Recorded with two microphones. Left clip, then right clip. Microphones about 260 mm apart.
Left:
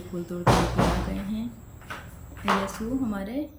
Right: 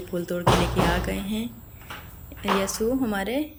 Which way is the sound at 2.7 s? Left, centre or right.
Centre.